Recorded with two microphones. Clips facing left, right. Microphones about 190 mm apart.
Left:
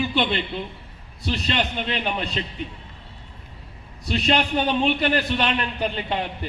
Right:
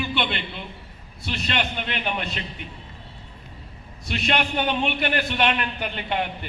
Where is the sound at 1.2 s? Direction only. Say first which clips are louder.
Left 3 dB; 35° left (ahead or behind).